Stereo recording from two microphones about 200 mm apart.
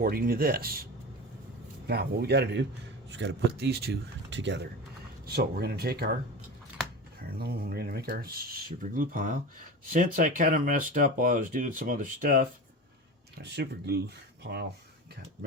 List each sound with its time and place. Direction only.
0.0 s speech: 45° right (ahead or behind)
1.9 s speech: 55° right (ahead or behind)
5.2 s speech: 50° right (ahead or behind)
7.3 s speech: 50° right (ahead or behind)
13.4 s speech: 55° right (ahead or behind)